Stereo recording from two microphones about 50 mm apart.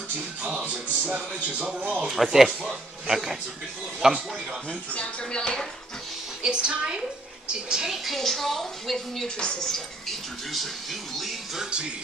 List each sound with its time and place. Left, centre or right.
0.7 s a woman's voice: right
2.0 s speech: centre
4.6 s speech: centre
6.4 s a woman's voice: centre
7.7 s speech: centre